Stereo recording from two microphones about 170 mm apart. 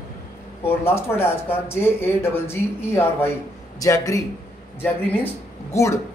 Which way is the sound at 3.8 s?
20° left (ahead or behind).